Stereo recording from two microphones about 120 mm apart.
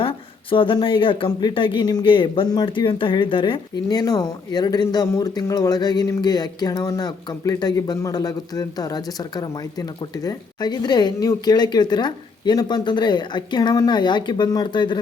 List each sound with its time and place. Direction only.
0.5 s speech: 45° left (ahead or behind)